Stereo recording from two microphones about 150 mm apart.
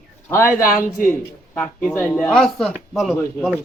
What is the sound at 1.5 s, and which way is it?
Speech, 10° left (ahead or behind).